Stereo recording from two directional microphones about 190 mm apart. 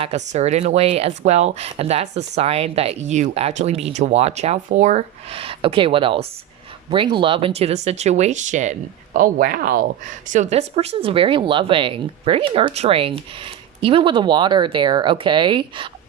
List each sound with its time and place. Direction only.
0.0 s speech: 35° right (ahead or behind); by 9.8 s 50° right (ahead or behind)
10.2 s speech: 40° right (ahead or behind)